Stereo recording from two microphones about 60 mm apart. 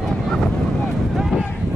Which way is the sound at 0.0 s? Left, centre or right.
Centre.